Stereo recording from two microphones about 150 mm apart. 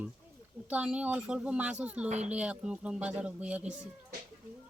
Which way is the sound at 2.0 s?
50° right (ahead or behind).